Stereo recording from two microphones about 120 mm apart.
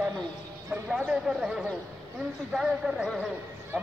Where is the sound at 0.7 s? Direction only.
15° right (ahead or behind).